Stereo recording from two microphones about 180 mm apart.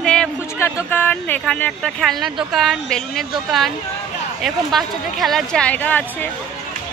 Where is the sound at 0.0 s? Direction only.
5° left (ahead or behind).